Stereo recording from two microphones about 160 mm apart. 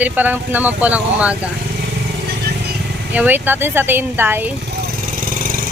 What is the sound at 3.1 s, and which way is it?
Speech, 10° right (ahead or behind).